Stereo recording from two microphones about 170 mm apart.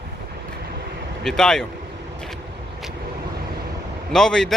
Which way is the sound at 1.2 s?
5° left (ahead or behind).